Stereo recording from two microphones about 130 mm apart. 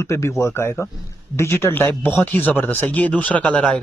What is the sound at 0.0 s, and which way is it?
Speech, 20° left (ahead or behind).